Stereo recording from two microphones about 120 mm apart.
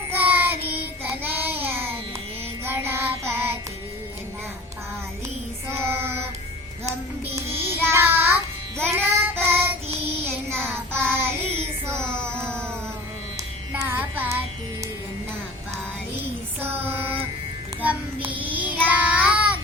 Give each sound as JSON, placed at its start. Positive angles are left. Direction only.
{"t": 0.1, "sound": "child singing", "side_deg": -15}
{"t": 5.6, "sound": "child singing", "side_deg": -20}
{"t": 7.3, "sound": "child singing", "side_deg": -20}
{"t": 13.7, "sound": "carnatic music", "side_deg": -15}
{"t": 16.6, "sound": "child singing", "side_deg": -15}